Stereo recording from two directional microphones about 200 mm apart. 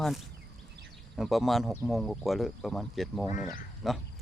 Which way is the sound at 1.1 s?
Centre (ahead or behind).